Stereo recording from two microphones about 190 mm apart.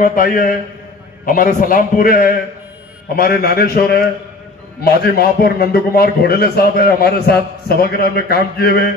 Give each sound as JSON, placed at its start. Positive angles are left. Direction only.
{"t": 0.0, "sound": "a man's voice", "side_deg": 45}